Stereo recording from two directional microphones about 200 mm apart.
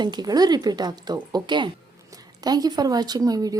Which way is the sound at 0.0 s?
20° right (ahead or behind).